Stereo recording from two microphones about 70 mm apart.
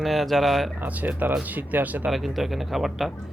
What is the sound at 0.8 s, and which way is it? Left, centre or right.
Speech, right.